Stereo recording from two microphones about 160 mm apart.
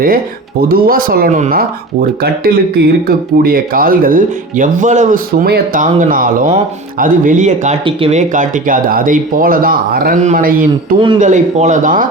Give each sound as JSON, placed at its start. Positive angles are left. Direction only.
{"t": 0.7, "sound": "speech", "side_deg": -65}
{"t": 5.8, "sound": "speech", "side_deg": -55}
{"t": 7.9, "sound": "speech", "side_deg": -35}
{"t": 8.3, "sound": "speech", "side_deg": -55}
{"t": 10.2, "sound": "speech", "side_deg": -55}
{"t": 11.2, "sound": "speech", "side_deg": -50}